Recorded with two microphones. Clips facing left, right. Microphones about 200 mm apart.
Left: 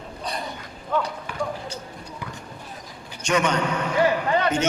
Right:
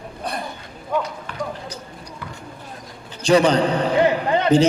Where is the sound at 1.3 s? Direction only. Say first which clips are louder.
Left 1 dB; 10° left (ahead or behind).